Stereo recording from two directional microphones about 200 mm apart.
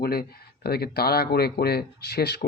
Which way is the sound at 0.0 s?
50° left (ahead or behind).